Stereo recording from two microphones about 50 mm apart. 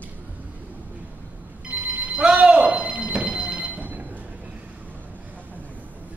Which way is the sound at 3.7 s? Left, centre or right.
Right.